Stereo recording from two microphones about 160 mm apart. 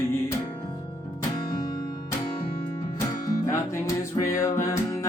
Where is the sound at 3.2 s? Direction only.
20° left (ahead or behind).